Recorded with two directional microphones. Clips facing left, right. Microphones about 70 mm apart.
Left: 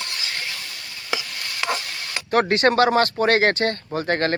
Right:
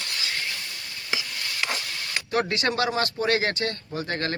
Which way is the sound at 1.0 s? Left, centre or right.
Left.